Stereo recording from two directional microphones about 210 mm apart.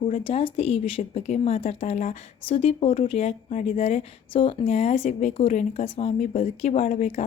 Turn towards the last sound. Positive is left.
turn(degrees=35)  # may be behind; listen again after turning